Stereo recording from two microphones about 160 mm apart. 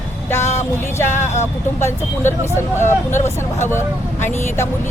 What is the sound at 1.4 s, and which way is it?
Speech, 15° left (ahead or behind).